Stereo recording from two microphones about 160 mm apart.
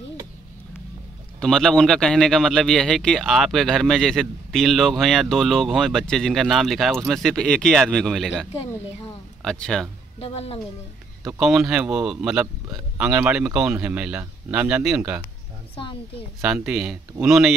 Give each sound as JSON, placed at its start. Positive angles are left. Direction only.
{"t": 1.4, "sound": "a man's voice", "side_deg": 5}
{"t": 10.2, "sound": "a woman's voice", "side_deg": 40}
{"t": 11.2, "sound": "a man's voice", "side_deg": -5}
{"t": 15.7, "sound": "speech", "side_deg": 30}
{"t": 16.3, "sound": "a man's voice", "side_deg": -5}